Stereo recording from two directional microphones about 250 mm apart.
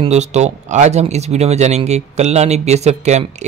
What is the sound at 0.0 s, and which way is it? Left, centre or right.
Speech, right.